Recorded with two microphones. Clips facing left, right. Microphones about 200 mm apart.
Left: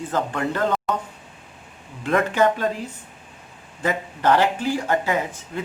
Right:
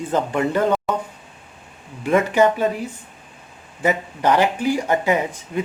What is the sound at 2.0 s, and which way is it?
Speech, 10° right (ahead or behind).